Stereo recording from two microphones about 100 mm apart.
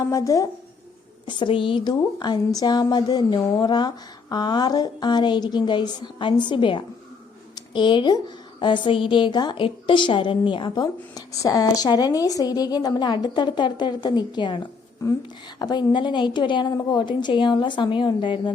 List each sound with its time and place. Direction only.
0.0 s speech: 35° left (ahead or behind)
1.3 s a woman's voice: 55° left (ahead or behind)
11.1 s a woman's voice: 35° left (ahead or behind); by 18.5 s 55° left (ahead or behind)